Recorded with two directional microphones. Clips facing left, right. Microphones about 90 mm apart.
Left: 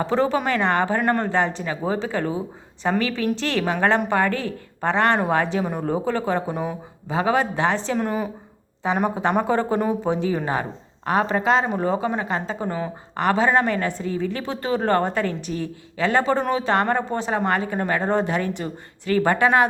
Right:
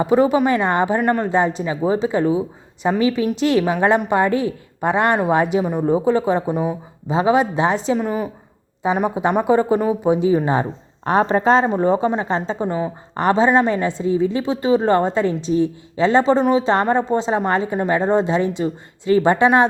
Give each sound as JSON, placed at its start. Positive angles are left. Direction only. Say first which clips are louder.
{"t": 0.0, "sound": "a woman's voice", "louder": "right 6 dB", "side_deg": -15}
{"t": 7.1, "sound": "a woman's voice", "louder": "right 5 dB", "side_deg": -20}
{"t": 7.9, "sound": "a woman's voice", "louder": "right 2 dB", "side_deg": -5}
{"t": 8.8, "sound": "a woman's voice", "louder": "right 3 dB", "side_deg": -15}